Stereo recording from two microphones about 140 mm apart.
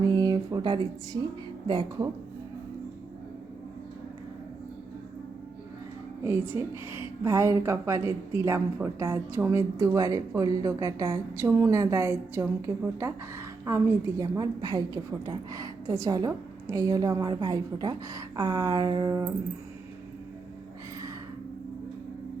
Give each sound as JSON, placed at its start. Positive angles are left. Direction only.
{"t": 0.1, "sound": "a woman's voice", "side_deg": -30}
{"t": 6.2, "sound": "a woman's voice", "side_deg": -15}